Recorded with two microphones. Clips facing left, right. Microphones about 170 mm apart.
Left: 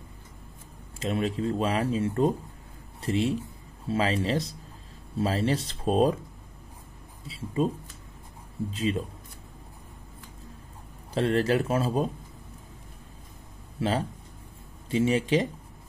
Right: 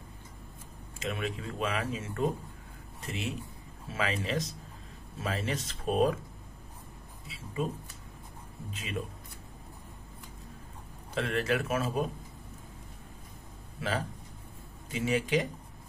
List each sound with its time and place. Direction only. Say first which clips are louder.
0.9 s a man's voice: left 7 dB; 30° left (ahead or behind)
7.2 s a man's voice: left 7 dB; 30° left (ahead or behind)
8.7 s speech: left 9 dB; 30° left (ahead or behind)
11.1 s speech: left 6 dB; 30° left (ahead or behind)
13.7 s a man's voice: left 6 dB; 30° left (ahead or behind)